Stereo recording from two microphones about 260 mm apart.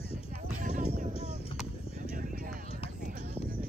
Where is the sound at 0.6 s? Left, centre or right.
Right.